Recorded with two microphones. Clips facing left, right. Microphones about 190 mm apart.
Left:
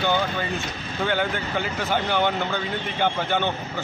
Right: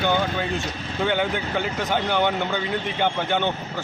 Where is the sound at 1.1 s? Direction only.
Centre (ahead or behind).